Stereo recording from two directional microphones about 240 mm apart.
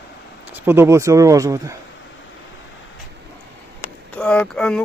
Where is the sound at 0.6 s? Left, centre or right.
Centre.